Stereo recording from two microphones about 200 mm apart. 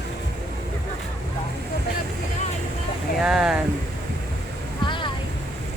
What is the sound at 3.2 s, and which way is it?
Speech, 5° right (ahead or behind).